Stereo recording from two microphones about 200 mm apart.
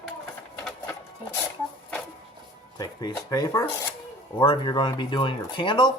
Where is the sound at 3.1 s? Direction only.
20° left (ahead or behind).